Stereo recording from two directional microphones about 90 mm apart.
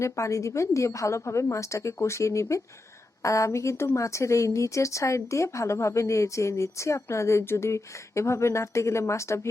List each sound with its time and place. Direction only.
0.0 s a woman's voice: 35° left (ahead or behind)